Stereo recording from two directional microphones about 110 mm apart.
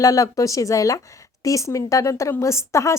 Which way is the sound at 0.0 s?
30° left (ahead or behind).